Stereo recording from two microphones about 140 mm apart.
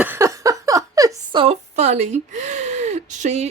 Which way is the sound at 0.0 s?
20° right (ahead or behind).